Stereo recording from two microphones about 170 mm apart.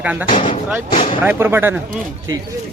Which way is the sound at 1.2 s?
15° right (ahead or behind).